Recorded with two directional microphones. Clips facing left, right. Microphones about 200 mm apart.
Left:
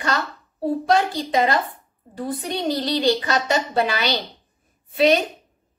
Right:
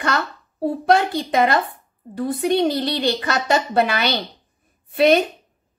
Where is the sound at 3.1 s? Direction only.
60° right (ahead or behind).